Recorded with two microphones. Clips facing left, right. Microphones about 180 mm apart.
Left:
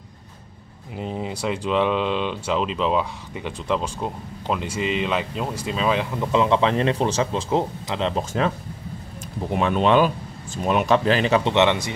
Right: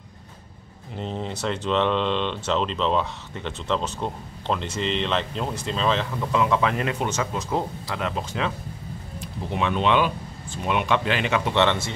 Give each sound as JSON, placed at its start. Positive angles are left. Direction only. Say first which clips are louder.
{"t": 0.9, "sound": "speech", "louder": "left 2 dB", "side_deg": 10}
{"t": 8.2, "sound": "speech", "louder": "left 4 dB", "side_deg": 45}
{"t": 11.5, "sound": "speech", "louder": "left 3 dB", "side_deg": 15}